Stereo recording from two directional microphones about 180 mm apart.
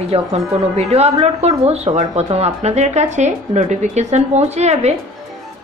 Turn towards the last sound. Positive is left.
turn(degrees=-35)  # may be behind; listen again after turning